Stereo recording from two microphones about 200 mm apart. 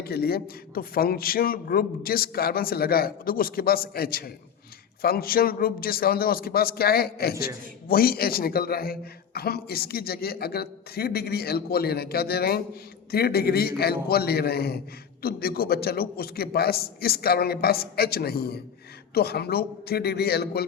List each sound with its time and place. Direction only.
0.0 s a man's voice: 50° left (ahead or behind)